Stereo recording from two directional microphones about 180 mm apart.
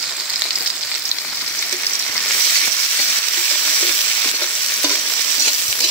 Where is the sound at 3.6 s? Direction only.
5° left (ahead or behind).